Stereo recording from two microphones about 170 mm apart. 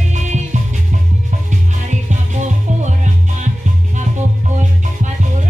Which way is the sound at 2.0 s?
45° right (ahead or behind).